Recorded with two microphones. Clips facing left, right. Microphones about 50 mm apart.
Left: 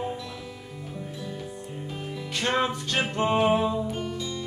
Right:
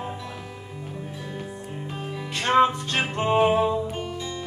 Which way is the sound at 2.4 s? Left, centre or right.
Right.